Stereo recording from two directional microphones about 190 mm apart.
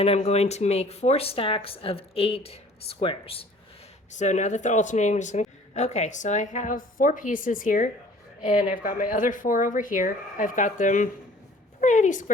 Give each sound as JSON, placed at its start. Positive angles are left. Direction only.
{"t": 0.0, "sound": "speech", "side_deg": 35}
{"t": 4.2, "sound": "speech", "side_deg": 40}